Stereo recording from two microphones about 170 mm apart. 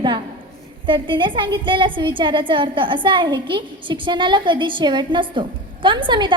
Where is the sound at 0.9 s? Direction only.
30° right (ahead or behind).